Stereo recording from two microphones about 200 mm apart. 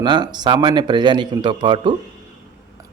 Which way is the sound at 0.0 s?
20° right (ahead or behind).